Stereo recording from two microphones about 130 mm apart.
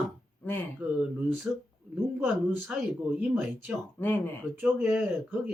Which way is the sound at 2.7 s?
10° right (ahead or behind).